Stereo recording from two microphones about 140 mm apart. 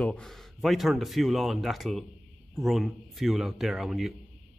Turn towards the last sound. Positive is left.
turn(degrees=-5)  # may be behind; listen again after turning